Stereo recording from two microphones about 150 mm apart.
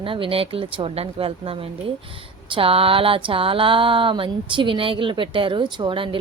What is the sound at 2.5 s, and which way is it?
A woman's voice, 40° right (ahead or behind).